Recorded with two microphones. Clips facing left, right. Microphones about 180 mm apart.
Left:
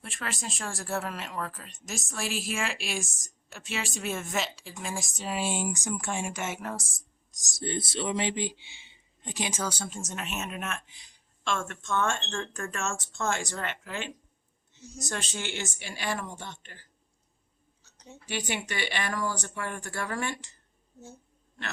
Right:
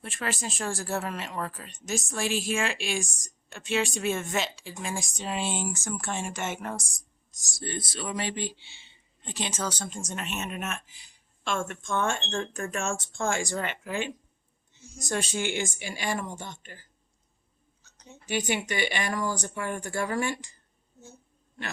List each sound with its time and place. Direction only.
0.0 s speech: centre (ahead or behind)
7.3 s speech: 20° left (ahead or behind); by 16.7 s 10° right (ahead or behind)
18.1 s speech: 10° right (ahead or behind)